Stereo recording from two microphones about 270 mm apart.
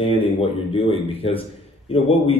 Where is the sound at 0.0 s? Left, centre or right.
Left.